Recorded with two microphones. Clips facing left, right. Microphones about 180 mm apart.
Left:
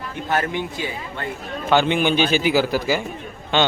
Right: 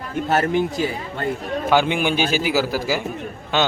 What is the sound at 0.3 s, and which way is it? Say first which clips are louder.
A man's voice: right 4 dB; 40° right (ahead or behind).